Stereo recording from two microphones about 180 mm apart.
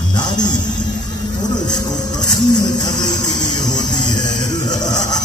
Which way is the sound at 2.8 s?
20° left (ahead or behind).